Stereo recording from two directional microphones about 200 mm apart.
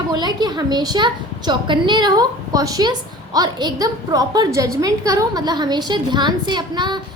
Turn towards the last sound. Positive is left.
turn(degrees=-20)  # may be behind; listen again after turning